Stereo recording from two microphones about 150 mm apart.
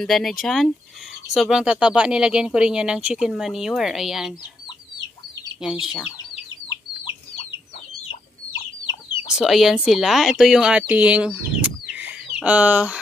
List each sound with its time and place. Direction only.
0.0 s speech: centre (ahead or behind)
5.6 s speech: 5° right (ahead or behind)
6.7 s chicken: 35° left (ahead or behind)
9.1 s speech: 5° right (ahead or behind)